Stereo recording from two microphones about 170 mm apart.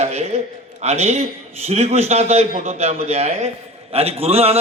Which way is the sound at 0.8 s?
40° right (ahead or behind).